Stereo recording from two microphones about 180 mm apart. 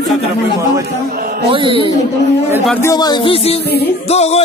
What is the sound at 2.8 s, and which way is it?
Speech, 20° left (ahead or behind).